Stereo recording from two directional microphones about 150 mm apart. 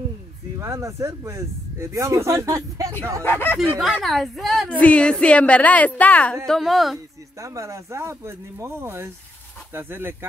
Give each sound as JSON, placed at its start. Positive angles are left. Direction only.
{"t": 0.6, "sound": "speech", "side_deg": -20}
{"t": 3.3, "sound": "a woman's voice", "side_deg": 15}
{"t": 3.7, "sound": "a woman's voice", "side_deg": 0}
{"t": 7.3, "sound": "speech", "side_deg": -20}